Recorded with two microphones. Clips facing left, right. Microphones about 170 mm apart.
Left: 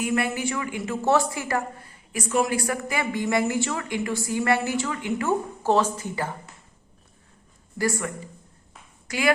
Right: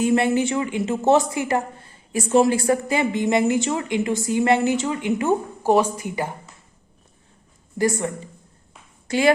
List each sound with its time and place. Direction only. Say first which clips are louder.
0.0 s a woman's voice: right 7 dB; 25° right (ahead or behind)
7.8 s a woman's voice: right 5 dB; 20° right (ahead or behind)